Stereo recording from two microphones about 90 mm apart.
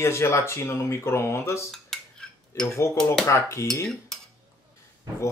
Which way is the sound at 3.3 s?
30° left (ahead or behind).